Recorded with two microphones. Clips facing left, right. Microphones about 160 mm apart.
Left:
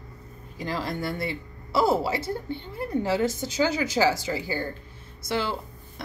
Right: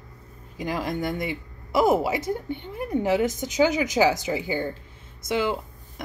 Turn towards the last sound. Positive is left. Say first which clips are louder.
# right 2 dB
turn(degrees=-15)  # may be behind; listen again after turning